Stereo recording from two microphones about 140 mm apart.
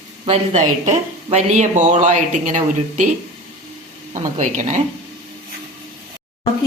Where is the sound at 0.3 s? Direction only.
55° right (ahead or behind).